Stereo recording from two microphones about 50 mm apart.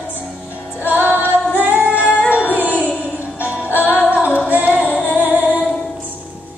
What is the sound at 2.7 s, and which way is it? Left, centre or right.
Music, left.